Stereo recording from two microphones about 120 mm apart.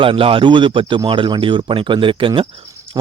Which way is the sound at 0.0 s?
50° right (ahead or behind).